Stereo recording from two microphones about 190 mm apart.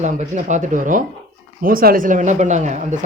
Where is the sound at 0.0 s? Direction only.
40° right (ahead or behind).